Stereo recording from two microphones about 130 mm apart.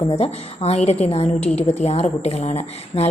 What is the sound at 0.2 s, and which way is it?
A woman's voice, 55° left (ahead or behind).